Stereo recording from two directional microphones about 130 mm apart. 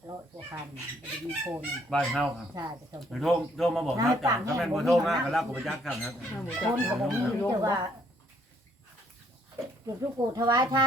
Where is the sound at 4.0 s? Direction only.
25° right (ahead or behind).